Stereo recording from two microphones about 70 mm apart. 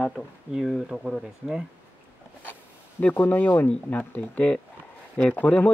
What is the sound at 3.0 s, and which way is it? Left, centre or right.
Speech, left.